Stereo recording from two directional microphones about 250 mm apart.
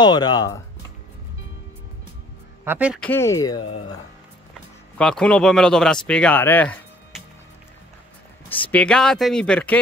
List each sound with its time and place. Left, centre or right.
0.0 s speech: centre
2.6 s speech: centre
3.1 s speech: centre
4.9 s speech: centre
8.5 s speech: centre